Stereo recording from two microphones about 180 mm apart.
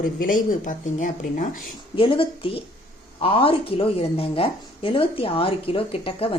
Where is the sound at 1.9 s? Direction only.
30° left (ahead or behind).